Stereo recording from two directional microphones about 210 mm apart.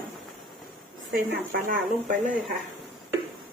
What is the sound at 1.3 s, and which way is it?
Speech, 40° right (ahead or behind).